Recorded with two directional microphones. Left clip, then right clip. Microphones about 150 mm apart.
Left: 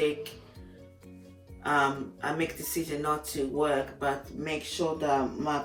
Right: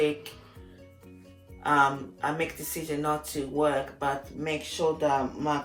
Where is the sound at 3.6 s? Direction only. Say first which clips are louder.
Right 2 dB; 20° right (ahead or behind).